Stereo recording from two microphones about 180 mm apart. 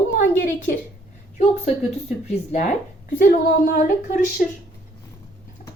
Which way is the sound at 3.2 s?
55° left (ahead or behind).